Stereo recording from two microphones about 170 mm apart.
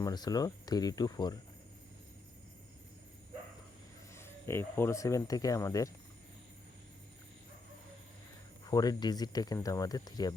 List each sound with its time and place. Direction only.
0.0 s speech: 20° left (ahead or behind)
4.1 s speech: 15° left (ahead or behind)
8.6 s speech: 20° left (ahead or behind)